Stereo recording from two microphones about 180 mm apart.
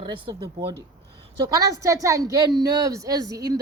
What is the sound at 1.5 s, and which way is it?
Speech, 20° right (ahead or behind).